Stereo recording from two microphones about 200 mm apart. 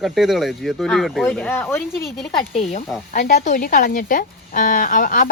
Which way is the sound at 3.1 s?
40° left (ahead or behind).